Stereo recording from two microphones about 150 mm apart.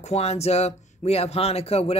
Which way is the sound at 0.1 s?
45° left (ahead or behind).